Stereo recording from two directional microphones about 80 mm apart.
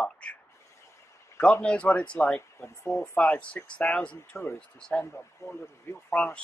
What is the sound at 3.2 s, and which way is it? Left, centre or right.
Speech, centre.